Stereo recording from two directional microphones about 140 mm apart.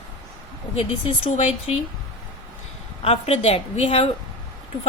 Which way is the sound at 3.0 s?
45° left (ahead or behind).